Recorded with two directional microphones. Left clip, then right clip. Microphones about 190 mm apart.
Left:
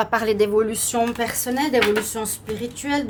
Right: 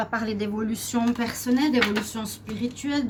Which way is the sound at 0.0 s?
65° left (ahead or behind).